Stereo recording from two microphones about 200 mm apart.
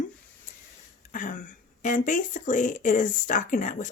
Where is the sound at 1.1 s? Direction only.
40° left (ahead or behind).